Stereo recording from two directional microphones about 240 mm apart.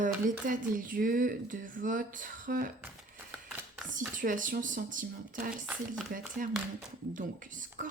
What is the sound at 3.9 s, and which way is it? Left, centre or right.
Speech, right.